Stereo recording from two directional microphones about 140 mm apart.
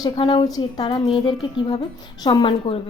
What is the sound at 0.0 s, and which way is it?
Speech, 35° left (ahead or behind).